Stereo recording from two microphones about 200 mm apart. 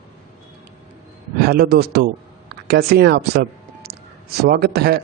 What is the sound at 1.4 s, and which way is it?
Speech, 50° right (ahead or behind).